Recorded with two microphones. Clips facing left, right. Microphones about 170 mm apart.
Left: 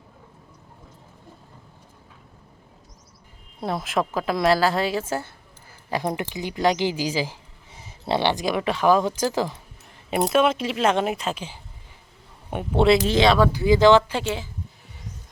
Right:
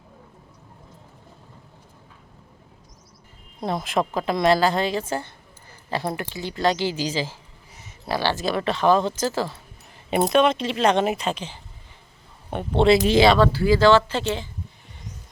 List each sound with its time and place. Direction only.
3.6 s a woman's voice: 5° left (ahead or behind)
7.7 s speech: 30° left (ahead or behind)
10.1 s a woman's voice: 5° left (ahead or behind)
13.1 s speech: 10° right (ahead or behind)
13.3 s speech: 15° left (ahead or behind)